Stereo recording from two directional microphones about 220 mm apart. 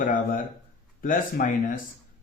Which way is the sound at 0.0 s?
35° left (ahead or behind).